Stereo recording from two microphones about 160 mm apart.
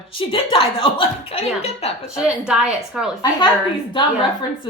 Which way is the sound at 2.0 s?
5° right (ahead or behind).